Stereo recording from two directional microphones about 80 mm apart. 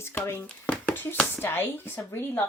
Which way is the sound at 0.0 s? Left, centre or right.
Left.